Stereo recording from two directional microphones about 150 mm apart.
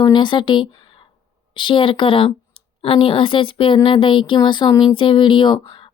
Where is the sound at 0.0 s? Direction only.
30° left (ahead or behind).